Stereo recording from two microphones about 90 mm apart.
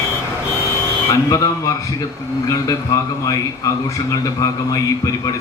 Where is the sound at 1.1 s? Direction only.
35° left (ahead or behind).